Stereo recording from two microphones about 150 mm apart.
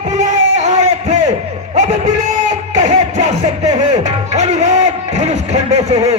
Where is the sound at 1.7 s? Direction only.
50° right (ahead or behind).